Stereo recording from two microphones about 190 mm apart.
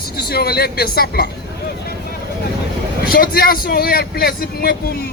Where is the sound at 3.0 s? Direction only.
50° left (ahead or behind).